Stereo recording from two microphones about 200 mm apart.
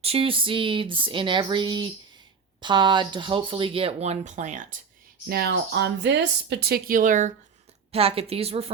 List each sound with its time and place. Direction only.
0.0 s speech: 30° right (ahead or behind)
5.3 s a woman's voice: 55° right (ahead or behind); by 8.7 s 30° right (ahead or behind)